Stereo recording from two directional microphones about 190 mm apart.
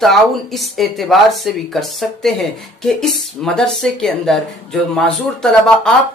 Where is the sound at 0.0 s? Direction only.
Centre (ahead or behind).